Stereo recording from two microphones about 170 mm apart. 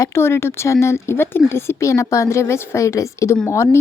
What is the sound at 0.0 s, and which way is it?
Speech, 15° left (ahead or behind).